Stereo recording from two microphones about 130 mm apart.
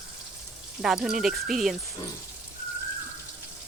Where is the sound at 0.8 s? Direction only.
5° right (ahead or behind).